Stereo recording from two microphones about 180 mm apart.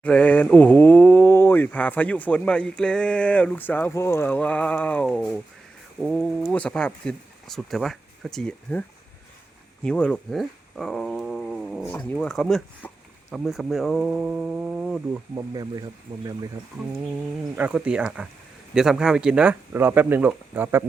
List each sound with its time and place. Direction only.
0.0 s speech: 5° left (ahead or behind)
9.8 s dog: 5° left (ahead or behind)
11.9 s speech: 10° left (ahead or behind); by 15.2 s 5° right (ahead or behind)
15.4 s speech: 20° right (ahead or behind)
17.5 s speech: 10° right (ahead or behind)